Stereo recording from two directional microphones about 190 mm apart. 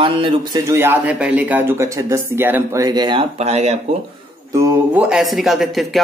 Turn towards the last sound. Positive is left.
turn(degrees=0)  # may be behind; listen again after turning